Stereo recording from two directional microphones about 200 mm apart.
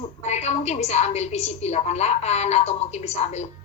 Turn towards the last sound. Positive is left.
turn(degrees=35)  # may be behind; listen again after turning